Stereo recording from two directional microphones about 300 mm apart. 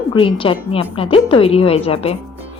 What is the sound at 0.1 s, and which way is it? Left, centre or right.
A woman's voice, centre.